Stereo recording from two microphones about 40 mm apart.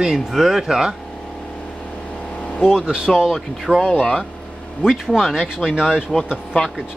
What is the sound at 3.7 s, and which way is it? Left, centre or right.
Speech, centre.